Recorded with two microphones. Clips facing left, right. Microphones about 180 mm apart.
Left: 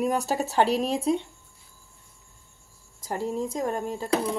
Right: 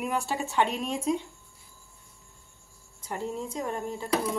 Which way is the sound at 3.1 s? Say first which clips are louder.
Left 5 dB; 40° left (ahead or behind).